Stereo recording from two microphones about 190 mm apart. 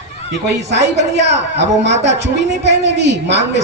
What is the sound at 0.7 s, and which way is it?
A woman's voice, 65° right (ahead or behind).